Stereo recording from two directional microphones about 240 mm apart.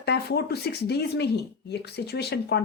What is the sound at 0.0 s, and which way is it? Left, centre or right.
Speech, left.